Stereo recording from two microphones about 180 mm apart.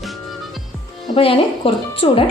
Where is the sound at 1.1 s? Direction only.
30° left (ahead or behind).